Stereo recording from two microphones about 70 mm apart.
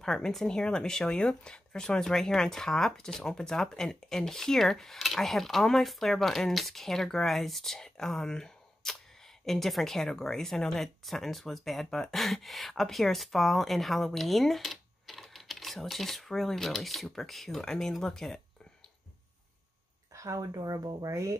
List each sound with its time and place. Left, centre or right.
0.0 s speech: centre
20.1 s a sound: right
20.5 s speech: right
21.1 s speech: right